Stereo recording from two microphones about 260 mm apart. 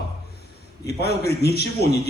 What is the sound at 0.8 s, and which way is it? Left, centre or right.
Speech, left.